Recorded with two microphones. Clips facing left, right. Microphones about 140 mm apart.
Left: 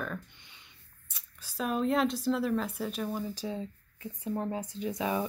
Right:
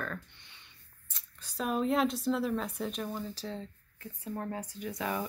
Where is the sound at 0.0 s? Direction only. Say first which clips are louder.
Left 2 dB; 10° left (ahead or behind).